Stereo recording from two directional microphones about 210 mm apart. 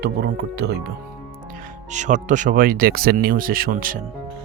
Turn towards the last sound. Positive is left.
turn(degrees=-40)  # may be behind; listen again after turning